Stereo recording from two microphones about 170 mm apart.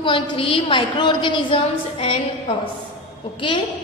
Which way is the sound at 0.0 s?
30° left (ahead or behind).